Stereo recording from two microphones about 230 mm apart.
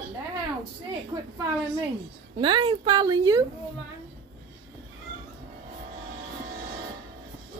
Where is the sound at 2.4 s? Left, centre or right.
Right.